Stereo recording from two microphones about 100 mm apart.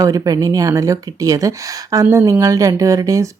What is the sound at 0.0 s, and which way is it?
Speech, 35° right (ahead or behind).